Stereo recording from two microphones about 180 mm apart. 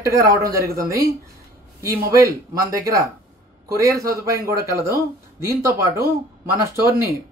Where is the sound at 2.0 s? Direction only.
20° right (ahead or behind).